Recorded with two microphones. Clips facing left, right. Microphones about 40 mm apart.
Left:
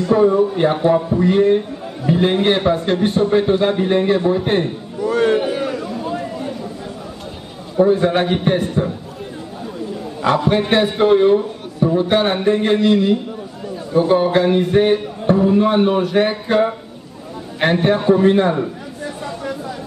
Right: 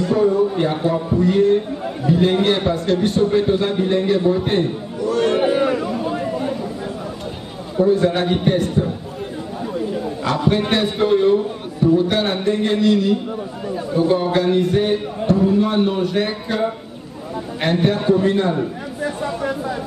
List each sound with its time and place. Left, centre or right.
0.1 s a man's voice: left
5.4 s a sound: right
5.9 s chatter: centre
7.7 s a man's voice: left
10.5 s a man's voice: centre
13.9 s a man's voice: left